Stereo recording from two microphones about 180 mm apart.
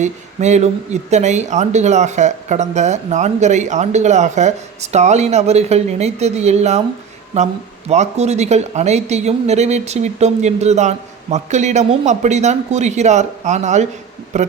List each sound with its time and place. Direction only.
0.0 s speech: 40° right (ahead or behind)